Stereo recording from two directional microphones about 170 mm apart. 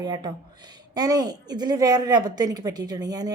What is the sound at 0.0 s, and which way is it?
A woman's voice, 25° right (ahead or behind).